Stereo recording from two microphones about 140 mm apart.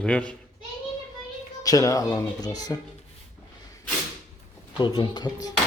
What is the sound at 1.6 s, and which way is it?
Speech, 25° left (ahead or behind).